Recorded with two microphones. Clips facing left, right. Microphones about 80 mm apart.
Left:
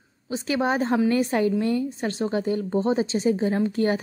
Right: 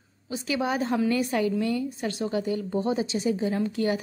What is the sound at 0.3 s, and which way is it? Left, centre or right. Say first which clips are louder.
A woman's voice: left 3 dB; left.